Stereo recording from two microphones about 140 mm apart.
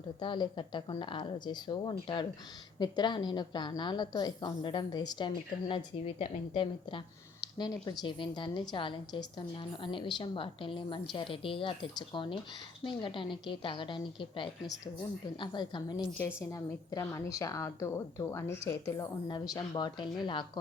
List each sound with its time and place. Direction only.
0.2 s a woman's voice: 35° left (ahead or behind)
16.1 s speech: 20° left (ahead or behind)
19.3 s a woman's voice: 30° left (ahead or behind)